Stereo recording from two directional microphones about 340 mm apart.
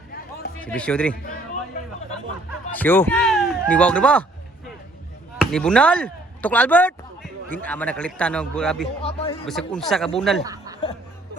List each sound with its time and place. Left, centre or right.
0.6 s speech: centre
2.7 s speech: centre
5.4 s speech: centre
9.0 s speech: centre
9.5 s speech: centre
10.4 s snicker: centre